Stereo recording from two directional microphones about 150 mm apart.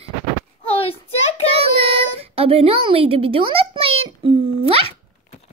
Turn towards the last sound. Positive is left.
turn(degrees=-40)  # may be behind; listen again after turning